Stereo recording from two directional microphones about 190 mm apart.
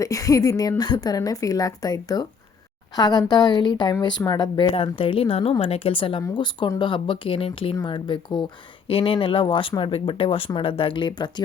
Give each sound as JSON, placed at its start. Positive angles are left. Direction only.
{"t": 0.0, "sound": "a woman's voice", "side_deg": 15}